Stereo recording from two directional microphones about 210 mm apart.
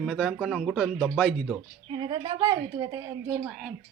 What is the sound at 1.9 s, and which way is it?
A woman's voice, 20° right (ahead or behind).